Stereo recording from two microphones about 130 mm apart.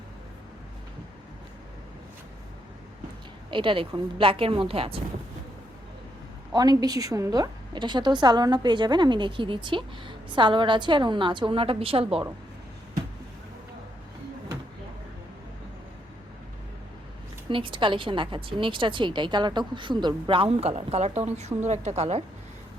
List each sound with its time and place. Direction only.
3.5 s a woman's voice: 40° right (ahead or behind)
6.5 s a woman's voice: 30° right (ahead or behind)
17.5 s a woman's voice: 40° right (ahead or behind); by 22.2 s 60° right (ahead or behind)